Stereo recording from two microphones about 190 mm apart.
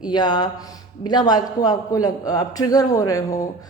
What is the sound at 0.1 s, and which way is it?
A woman's voice, 20° left (ahead or behind).